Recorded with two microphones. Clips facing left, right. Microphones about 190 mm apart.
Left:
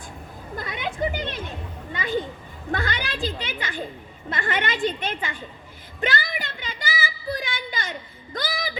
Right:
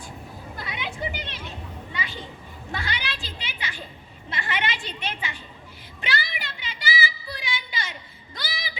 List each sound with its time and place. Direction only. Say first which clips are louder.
0.5 s children playing: left 5 dB; 50° left (ahead or behind)
2.7 s a child's voice: left 5 dB; 50° left (ahead or behind)
6.0 s child singing: left 5 dB; 50° left (ahead or behind)